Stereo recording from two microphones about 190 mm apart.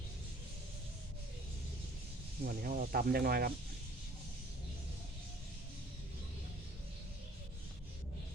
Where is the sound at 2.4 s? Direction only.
50° right (ahead or behind).